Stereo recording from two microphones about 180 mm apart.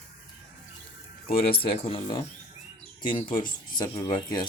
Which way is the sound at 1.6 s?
30° left (ahead or behind).